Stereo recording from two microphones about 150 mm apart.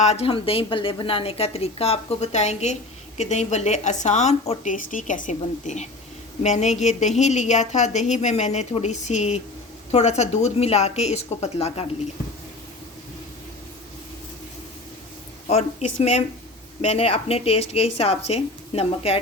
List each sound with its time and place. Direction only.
0.0 s a woman's voice: 45° left (ahead or behind)
15.4 s a woman's voice: 45° left (ahead or behind)